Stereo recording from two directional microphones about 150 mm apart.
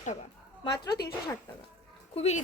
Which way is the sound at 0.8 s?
90° left.